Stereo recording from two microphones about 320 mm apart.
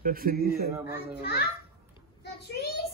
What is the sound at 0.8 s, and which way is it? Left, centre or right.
Speech, left.